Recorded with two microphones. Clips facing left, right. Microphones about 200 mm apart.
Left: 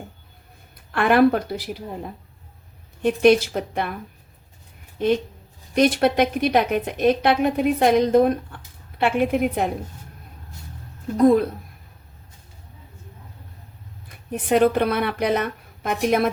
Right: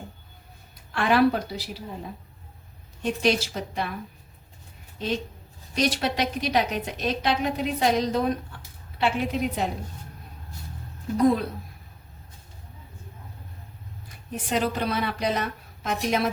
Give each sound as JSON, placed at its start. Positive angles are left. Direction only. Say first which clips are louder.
{"t": 0.9, "sound": "a woman's voice", "louder": "left 4 dB", "side_deg": 55}
{"t": 3.2, "sound": "a woman's voice", "louder": "left 9 dB", "side_deg": 55}
{"t": 4.9, "sound": "a woman's voice", "louder": "left 8 dB", "side_deg": 55}
{"t": 8.5, "sound": "a sound", "louder": "left 3 dB", "side_deg": 55}
{"t": 9.0, "sound": "a woman's voice", "louder": "left 5 dB", "side_deg": 55}
{"t": 14.3, "sound": "a woman's voice", "louder": "left 9 dB", "side_deg": 60}